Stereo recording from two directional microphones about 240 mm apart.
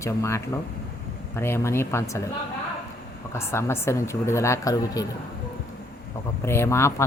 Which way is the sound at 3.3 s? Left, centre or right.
Centre.